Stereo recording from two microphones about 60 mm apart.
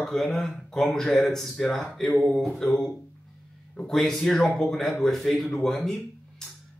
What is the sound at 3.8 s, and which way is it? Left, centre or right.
Speech, centre.